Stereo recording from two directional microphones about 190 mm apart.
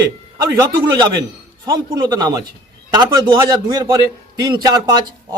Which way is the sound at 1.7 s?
20° right (ahead or behind).